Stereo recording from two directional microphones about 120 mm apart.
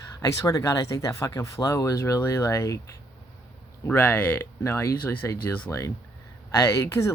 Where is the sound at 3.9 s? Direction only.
15° left (ahead or behind).